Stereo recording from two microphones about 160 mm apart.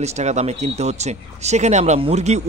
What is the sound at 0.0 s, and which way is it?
A man's voice, 45° right (ahead or behind).